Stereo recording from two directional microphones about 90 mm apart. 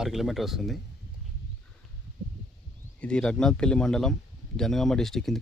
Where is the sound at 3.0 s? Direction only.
10° left (ahead or behind).